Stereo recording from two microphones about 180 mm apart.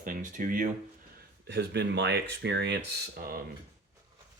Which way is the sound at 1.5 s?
70° right (ahead or behind).